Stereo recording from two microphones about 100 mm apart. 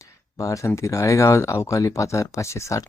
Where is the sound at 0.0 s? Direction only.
30° left (ahead or behind).